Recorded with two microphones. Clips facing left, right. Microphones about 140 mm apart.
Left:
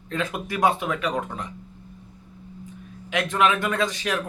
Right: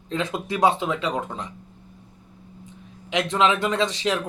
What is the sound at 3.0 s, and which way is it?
Speech, 20° right (ahead or behind).